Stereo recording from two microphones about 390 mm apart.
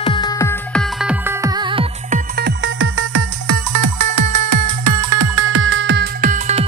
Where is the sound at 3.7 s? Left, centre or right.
Right.